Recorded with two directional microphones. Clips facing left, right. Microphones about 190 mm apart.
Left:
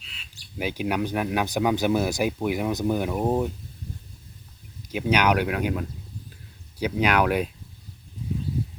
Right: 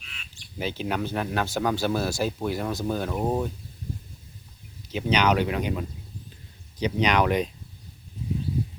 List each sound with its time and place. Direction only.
0.6 s speech: 10° left (ahead or behind)
4.9 s speech: 10° left (ahead or behind)